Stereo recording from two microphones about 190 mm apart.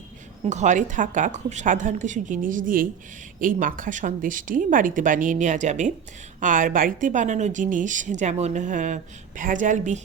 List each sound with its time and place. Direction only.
0.4 s a woman's voice: 40° right (ahead or behind)